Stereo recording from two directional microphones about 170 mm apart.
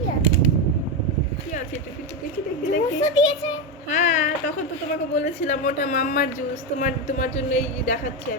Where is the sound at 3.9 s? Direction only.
45° left (ahead or behind).